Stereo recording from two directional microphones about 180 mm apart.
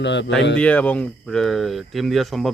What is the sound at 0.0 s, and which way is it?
Speech, 80° left.